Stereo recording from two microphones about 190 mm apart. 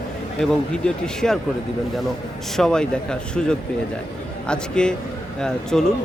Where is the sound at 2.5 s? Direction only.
5° left (ahead or behind).